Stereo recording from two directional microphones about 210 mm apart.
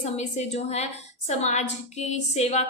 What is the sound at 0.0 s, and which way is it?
A woman's voice, 35° left (ahead or behind).